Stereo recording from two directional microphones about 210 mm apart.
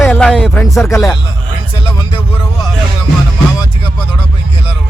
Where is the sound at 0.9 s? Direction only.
15° left (ahead or behind).